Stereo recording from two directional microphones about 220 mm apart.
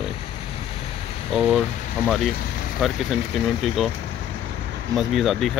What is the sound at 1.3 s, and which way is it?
Speech, centre (ahead or behind).